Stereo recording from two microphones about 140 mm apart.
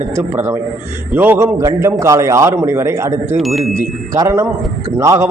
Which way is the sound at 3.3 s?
Centre (ahead or behind).